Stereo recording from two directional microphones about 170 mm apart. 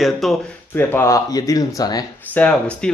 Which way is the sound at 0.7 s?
15° left (ahead or behind).